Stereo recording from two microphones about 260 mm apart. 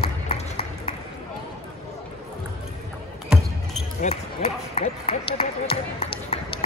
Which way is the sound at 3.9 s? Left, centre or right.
Left.